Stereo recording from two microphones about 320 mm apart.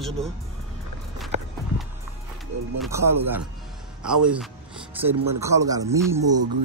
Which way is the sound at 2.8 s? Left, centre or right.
Centre.